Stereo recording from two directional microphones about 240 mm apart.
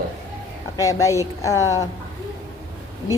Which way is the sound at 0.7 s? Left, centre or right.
Centre.